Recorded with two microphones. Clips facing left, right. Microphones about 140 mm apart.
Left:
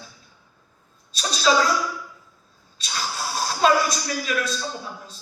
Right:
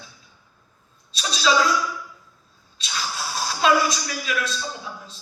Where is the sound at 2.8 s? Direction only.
45° left (ahead or behind).